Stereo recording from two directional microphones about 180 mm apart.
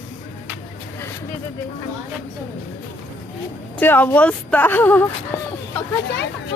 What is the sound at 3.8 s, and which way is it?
Speech, 10° left (ahead or behind).